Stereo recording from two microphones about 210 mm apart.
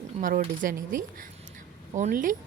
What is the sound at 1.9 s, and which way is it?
Speech, 35° right (ahead or behind).